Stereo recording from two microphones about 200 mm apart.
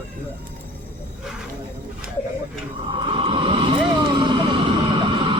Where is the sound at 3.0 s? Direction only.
25° right (ahead or behind).